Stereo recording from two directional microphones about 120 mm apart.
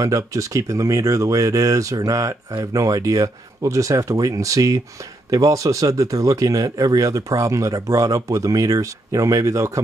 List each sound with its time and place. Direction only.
0.0 s speech: 25° right (ahead or behind)